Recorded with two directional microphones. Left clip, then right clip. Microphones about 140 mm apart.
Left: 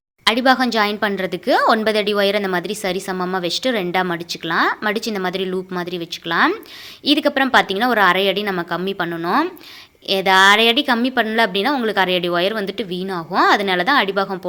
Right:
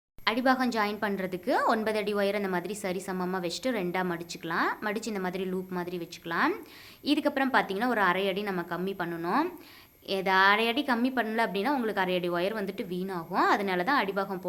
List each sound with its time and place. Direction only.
0.3 s a woman's voice: 30° left (ahead or behind)